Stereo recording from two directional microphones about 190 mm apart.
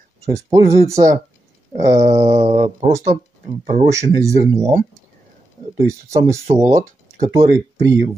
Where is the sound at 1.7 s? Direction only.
40° right (ahead or behind).